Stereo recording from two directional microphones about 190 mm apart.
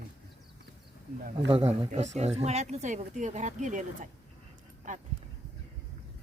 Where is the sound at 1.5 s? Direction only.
30° right (ahead or behind).